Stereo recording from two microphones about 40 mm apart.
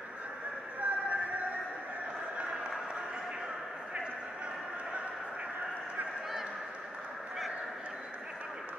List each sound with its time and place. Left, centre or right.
0.7 s music: right